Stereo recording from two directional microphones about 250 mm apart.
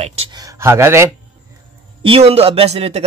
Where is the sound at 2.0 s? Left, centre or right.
Right.